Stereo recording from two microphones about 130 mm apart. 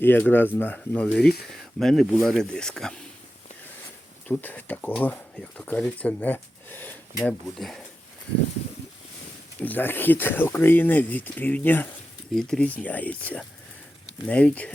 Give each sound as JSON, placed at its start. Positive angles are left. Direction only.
{"t": 0.0, "sound": "speech", "side_deg": 15}
{"t": 4.3, "sound": "speech", "side_deg": 15}
{"t": 7.4, "sound": "speech", "side_deg": 5}
{"t": 9.6, "sound": "speech", "side_deg": 15}
{"t": 12.3, "sound": "speech", "side_deg": 5}